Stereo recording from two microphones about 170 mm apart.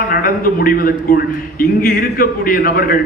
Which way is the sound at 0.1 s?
55° left (ahead or behind).